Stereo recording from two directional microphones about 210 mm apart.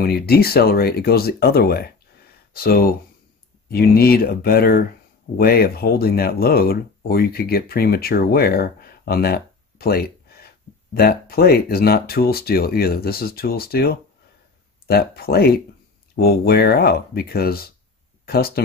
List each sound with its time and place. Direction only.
0.0 s speech: 50° left (ahead or behind)